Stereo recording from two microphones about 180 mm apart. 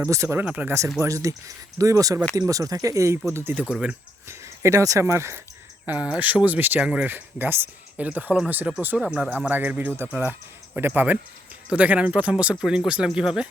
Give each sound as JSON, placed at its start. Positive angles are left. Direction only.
{"t": 0.0, "sound": "speech", "side_deg": -15}